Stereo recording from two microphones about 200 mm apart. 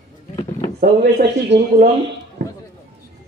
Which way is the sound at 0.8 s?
55° right (ahead or behind).